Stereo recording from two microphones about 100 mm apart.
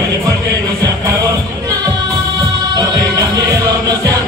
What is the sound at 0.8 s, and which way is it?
Music, 40° right (ahead or behind).